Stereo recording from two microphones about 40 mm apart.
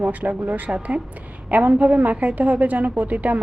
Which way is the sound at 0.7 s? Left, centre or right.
Right.